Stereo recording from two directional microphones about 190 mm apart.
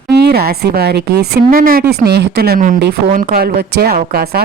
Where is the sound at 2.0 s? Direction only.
60° right (ahead or behind).